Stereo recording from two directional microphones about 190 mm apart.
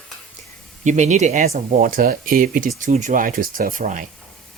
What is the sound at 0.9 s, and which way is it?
Speech, 40° right (ahead or behind).